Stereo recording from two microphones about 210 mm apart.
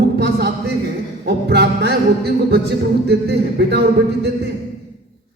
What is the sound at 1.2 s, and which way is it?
Music, 50° right (ahead or behind).